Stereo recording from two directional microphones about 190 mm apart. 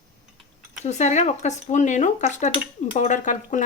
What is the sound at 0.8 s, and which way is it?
Speech, 35° left (ahead or behind).